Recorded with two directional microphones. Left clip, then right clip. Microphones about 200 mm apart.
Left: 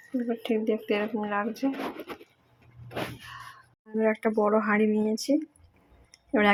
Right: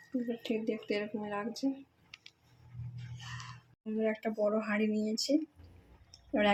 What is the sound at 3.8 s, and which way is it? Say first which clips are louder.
Speech: left 8 dB; 15° left (ahead or behind).